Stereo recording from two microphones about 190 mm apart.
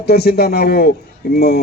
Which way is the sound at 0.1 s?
55° left (ahead or behind).